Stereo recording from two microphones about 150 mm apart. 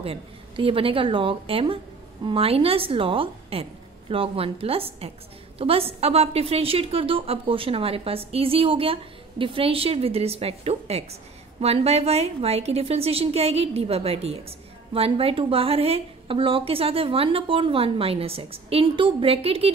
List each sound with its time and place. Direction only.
0.0 s a woman's voice: 40° right (ahead or behind)